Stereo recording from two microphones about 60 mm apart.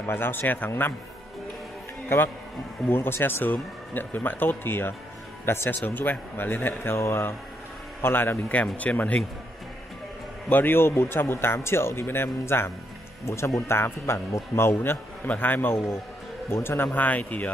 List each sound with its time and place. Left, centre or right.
0.0 s speech: left
2.0 s speech: left
3.5 s speech: left
8.5 s speech: left
10.5 s speech: left
13.2 s speech: left
13.6 s speech: left
14.8 s speech: left